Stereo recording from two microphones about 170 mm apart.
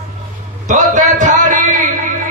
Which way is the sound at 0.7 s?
45° right (ahead or behind).